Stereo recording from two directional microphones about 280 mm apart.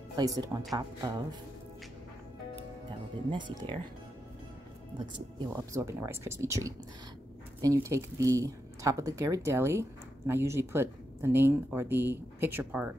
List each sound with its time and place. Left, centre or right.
0.1 s speech: centre
3.3 s speech: centre
5.7 s speech: centre